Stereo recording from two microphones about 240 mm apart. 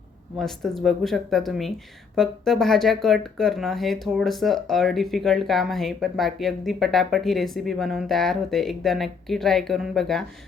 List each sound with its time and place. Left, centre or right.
0.3 s speech: centre